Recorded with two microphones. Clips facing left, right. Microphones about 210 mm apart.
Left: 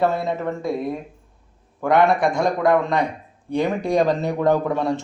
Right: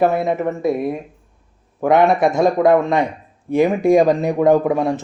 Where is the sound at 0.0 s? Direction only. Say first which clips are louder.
Right 4 dB; 15° right (ahead or behind).